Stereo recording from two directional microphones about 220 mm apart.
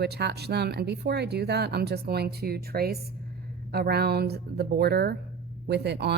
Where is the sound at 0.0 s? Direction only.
50° right (ahead or behind).